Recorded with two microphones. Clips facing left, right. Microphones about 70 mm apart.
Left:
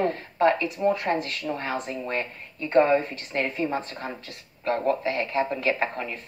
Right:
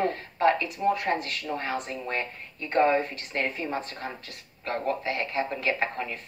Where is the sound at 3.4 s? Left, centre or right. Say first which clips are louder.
Left 3 dB; left.